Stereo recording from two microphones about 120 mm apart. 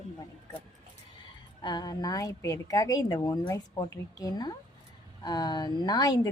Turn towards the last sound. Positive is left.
turn(degrees=35)  # may be behind; listen again after turning